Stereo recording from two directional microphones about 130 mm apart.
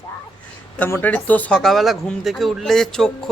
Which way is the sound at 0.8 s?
15° left (ahead or behind).